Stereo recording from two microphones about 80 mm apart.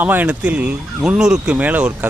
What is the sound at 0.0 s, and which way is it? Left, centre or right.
A man's voice, right.